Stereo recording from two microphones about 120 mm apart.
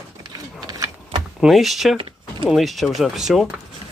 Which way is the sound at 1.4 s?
Centre (ahead or behind).